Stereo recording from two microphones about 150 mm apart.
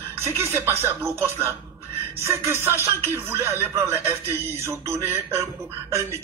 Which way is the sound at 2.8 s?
15° right (ahead or behind).